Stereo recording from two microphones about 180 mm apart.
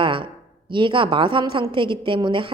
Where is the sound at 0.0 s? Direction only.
25° right (ahead or behind).